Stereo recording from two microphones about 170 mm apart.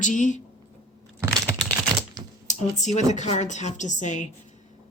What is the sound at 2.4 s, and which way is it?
A woman's voice, 45° left (ahead or behind).